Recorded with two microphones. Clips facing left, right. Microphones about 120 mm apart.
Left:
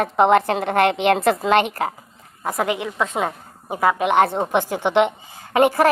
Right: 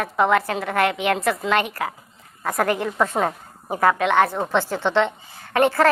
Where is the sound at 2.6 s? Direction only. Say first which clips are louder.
Right 2 dB; 10° left (ahead or behind).